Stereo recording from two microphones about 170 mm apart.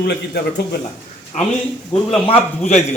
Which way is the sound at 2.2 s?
30° left (ahead or behind).